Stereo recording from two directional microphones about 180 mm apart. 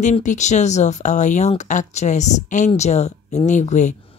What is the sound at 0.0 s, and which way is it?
Speech, 45° left (ahead or behind).